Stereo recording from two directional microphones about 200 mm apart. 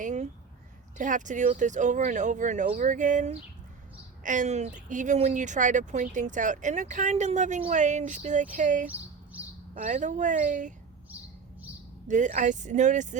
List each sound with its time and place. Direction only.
0.0 s a sound: 35° right (ahead or behind)
0.9 s speech: 40° right (ahead or behind)
11.1 s bird: 10° right (ahead or behind)
12.0 s speech: 40° right (ahead or behind)